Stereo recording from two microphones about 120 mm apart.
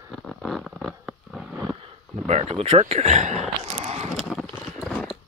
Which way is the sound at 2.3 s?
65° right (ahead or behind).